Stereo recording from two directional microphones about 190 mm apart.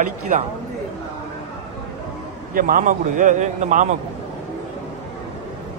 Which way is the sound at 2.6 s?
45° right (ahead or behind).